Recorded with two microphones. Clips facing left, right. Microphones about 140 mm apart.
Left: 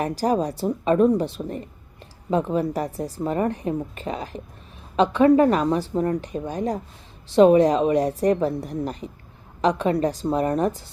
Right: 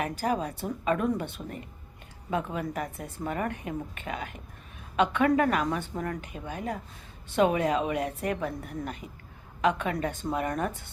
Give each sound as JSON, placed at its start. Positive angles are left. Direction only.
{"t": 0.0, "sound": "speech", "side_deg": 35}